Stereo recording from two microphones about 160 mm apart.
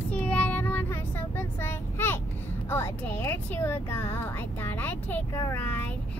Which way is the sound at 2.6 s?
15° left (ahead or behind).